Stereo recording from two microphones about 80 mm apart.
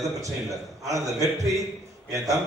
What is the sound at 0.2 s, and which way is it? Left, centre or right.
A man's voice, right.